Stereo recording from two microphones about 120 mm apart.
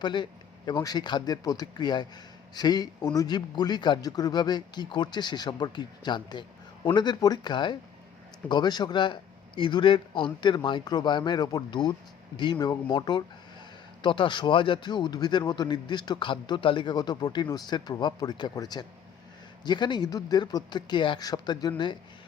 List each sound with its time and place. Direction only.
0.0 s speech: 40° left (ahead or behind)